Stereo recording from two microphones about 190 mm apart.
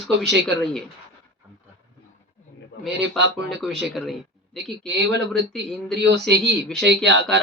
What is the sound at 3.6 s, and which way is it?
Speech, centre (ahead or behind).